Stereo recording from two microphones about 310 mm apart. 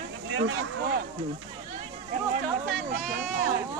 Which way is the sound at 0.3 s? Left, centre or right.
Right.